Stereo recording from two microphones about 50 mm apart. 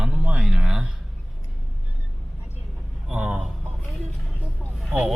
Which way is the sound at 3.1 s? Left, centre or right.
Right.